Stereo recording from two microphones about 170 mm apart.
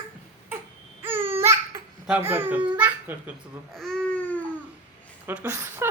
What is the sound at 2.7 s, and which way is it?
Babbling, 10° right (ahead or behind).